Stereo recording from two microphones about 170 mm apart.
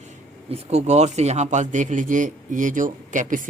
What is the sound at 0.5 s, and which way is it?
A man's voice, 40° right (ahead or behind).